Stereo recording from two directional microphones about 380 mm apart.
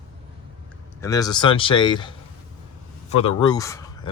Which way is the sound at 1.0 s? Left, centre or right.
Centre.